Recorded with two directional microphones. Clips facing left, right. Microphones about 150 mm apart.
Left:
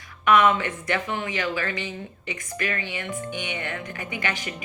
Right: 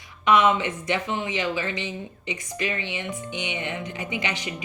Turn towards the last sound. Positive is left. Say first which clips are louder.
# right 1 dB
turn(degrees=-20)  # may be behind; listen again after turning